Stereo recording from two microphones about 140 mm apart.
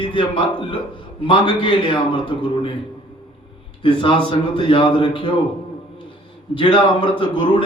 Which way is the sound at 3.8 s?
40° left (ahead or behind).